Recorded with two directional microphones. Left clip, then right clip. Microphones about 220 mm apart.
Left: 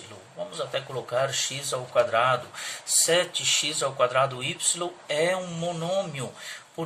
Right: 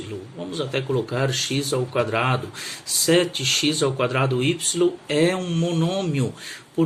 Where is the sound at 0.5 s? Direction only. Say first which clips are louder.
Right 7 dB; 20° right (ahead or behind).